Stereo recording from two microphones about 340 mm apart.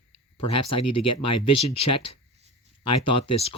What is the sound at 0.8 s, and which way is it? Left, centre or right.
Speech, left.